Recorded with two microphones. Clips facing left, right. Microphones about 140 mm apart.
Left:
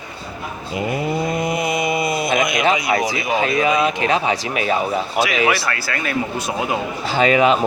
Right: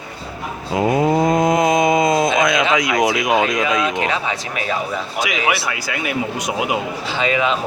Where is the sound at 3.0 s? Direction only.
90° right.